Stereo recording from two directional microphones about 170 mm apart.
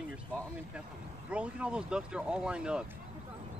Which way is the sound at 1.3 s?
5° right (ahead or behind).